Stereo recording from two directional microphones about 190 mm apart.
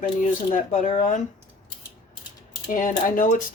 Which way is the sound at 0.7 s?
40° left (ahead or behind).